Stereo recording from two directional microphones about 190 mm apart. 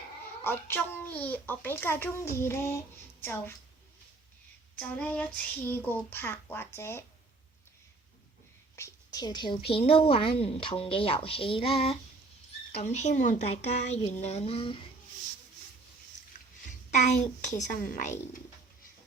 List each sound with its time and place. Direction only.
0.4 s a child's voice: 10° left (ahead or behind)
4.8 s a child's voice: 10° left (ahead or behind)
8.8 s a woman's voice: 15° left (ahead or behind)
16.6 s a child's voice: 40° left (ahead or behind)